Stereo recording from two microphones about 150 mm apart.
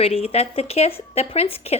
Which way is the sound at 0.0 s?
40° left (ahead or behind).